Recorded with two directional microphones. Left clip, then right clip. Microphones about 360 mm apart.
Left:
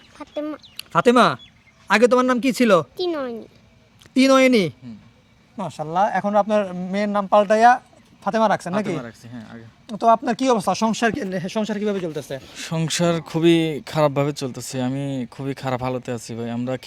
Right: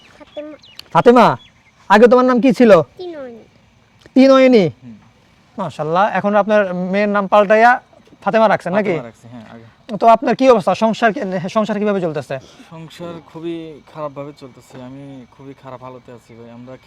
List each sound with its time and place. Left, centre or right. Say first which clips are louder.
0.2 s a sound: left 2 dB; left
0.8 s speech: right 6 dB; centre
3.0 s a sound: left 5 dB; left
4.1 s speech: right 6 dB; centre
9.0 s speech: right 5 dB; centre
9.8 s speech: right 6 dB; right
12.7 s speech: left 10 dB; left